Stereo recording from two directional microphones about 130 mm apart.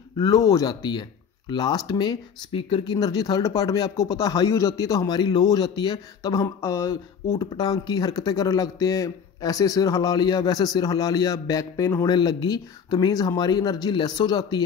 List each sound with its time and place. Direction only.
0.2 s speech: 30° left (ahead or behind)